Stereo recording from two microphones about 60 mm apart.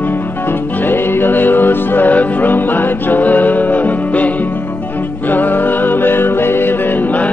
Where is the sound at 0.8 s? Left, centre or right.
Left.